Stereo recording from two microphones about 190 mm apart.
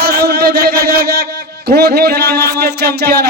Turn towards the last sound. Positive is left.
turn(degrees=-60)  # may be behind; listen again after turning